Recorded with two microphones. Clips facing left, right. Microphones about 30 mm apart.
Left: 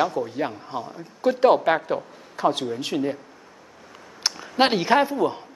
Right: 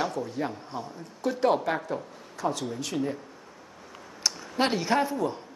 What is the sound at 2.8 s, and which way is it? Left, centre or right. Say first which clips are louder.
Speech: left 5 dB; left.